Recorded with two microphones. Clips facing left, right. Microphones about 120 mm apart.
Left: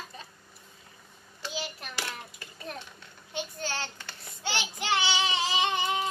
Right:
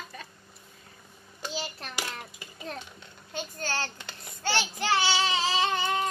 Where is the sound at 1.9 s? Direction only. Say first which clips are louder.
Right 1 dB; 15° right (ahead or behind).